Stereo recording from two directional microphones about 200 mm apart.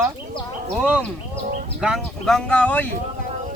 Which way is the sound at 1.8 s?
Centre (ahead or behind).